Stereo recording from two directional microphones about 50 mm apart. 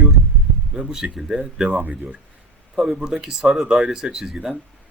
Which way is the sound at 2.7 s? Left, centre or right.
Centre.